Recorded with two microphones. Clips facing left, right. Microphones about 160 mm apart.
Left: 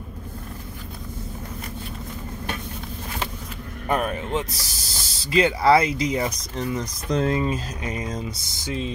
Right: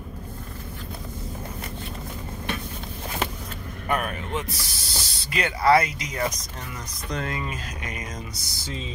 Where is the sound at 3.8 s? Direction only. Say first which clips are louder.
Left 3 dB; 35° left (ahead or behind).